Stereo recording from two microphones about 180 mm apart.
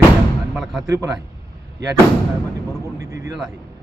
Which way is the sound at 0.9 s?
15° right (ahead or behind).